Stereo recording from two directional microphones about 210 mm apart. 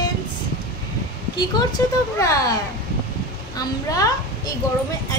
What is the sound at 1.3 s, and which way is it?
Speech, 20° left (ahead or behind).